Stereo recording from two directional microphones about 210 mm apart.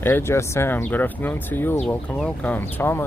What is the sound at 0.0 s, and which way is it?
Speech, 10° left (ahead or behind).